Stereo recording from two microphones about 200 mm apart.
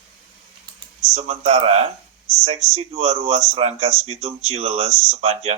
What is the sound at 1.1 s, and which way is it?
Speech, 30° right (ahead or behind).